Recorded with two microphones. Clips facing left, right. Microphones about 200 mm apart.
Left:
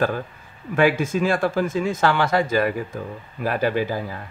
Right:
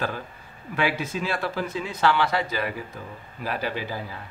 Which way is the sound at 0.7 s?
50° left (ahead or behind).